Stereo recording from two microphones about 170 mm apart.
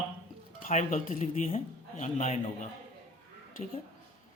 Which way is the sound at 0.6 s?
45° left (ahead or behind).